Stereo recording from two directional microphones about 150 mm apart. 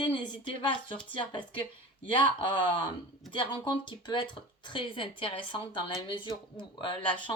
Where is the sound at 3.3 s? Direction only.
35° left (ahead or behind).